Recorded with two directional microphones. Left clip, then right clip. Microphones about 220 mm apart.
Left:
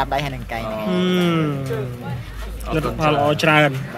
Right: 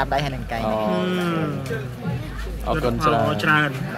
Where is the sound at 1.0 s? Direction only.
20° left (ahead or behind).